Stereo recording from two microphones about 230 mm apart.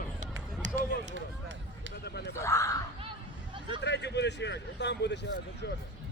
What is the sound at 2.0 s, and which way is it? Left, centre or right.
Speech, left.